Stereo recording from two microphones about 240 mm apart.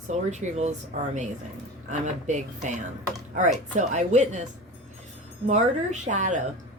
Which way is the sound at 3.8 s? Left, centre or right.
Right.